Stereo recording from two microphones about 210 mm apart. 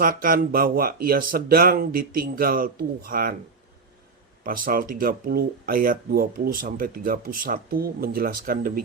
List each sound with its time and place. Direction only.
0.0 s speech: 40° right (ahead or behind)
4.4 s speech: 45° right (ahead or behind)